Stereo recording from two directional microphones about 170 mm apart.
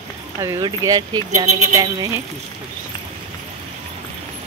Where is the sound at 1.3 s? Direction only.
40° right (ahead or behind).